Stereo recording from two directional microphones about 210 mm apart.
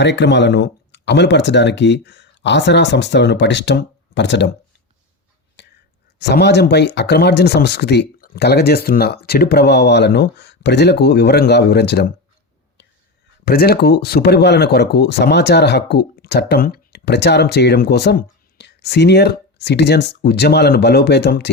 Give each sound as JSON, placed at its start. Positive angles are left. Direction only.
{"t": 0.0, "sound": "speech", "side_deg": 55}
{"t": 5.6, "sound": "a sound", "side_deg": 55}
{"t": 6.1, "sound": "speech", "side_deg": 50}
{"t": 13.4, "sound": "speech", "side_deg": 45}